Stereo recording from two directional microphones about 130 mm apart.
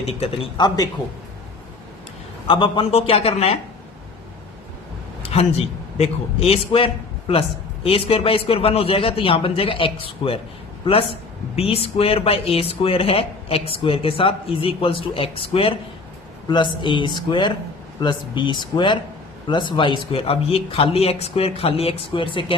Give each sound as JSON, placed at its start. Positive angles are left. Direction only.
{"t": 0.0, "sound": "speech", "side_deg": 50}
{"t": 0.5, "sound": "speech", "side_deg": 35}
{"t": 2.5, "sound": "speech", "side_deg": 40}
{"t": 5.2, "sound": "a sound", "side_deg": 50}
{"t": 6.0, "sound": "speech", "side_deg": 50}